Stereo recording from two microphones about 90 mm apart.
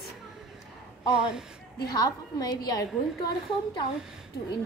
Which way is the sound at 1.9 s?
45° left (ahead or behind).